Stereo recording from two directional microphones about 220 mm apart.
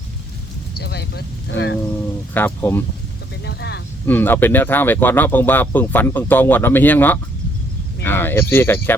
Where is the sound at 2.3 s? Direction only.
10° left (ahead or behind).